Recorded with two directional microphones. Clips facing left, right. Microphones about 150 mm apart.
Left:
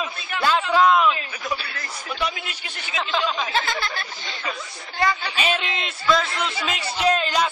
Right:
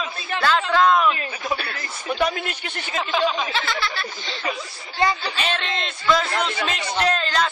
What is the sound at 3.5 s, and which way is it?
Music, 45° left (ahead or behind).